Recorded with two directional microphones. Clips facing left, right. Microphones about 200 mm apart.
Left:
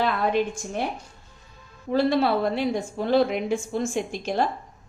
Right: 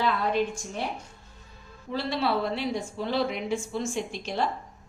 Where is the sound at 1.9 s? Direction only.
50° left (ahead or behind).